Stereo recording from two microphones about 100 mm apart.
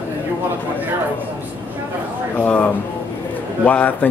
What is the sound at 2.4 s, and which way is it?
Speech, 10° left (ahead or behind).